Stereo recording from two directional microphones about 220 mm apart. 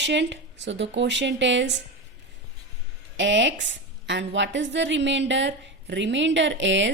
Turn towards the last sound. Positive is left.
turn(degrees=-55)  # may be behind; listen again after turning